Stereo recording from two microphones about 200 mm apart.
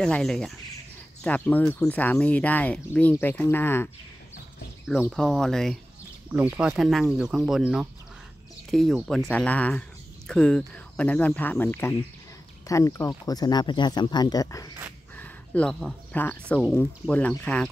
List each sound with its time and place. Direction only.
0.0 s speech: 5° left (ahead or behind)
5.1 s speech: centre (ahead or behind)
6.3 s speech: 10° right (ahead or behind); by 14.7 s 15° left (ahead or behind)
15.1 s speech: 5° left (ahead or behind)